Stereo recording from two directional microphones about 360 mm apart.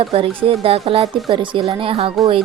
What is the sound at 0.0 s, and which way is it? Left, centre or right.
Speech, centre.